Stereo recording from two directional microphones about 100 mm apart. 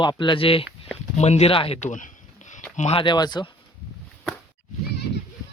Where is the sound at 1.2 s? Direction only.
80° left.